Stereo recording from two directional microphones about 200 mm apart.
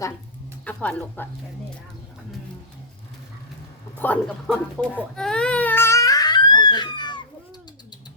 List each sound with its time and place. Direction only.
0.6 s speech: 5° left (ahead or behind)
3.9 s a man's voice: 10° left (ahead or behind)
4.8 s baby cry: 5° left (ahead or behind); by 7.2 s 20° left (ahead or behind)